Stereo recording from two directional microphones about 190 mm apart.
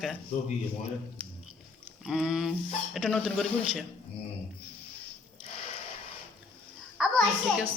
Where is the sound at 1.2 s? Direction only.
5° right (ahead or behind).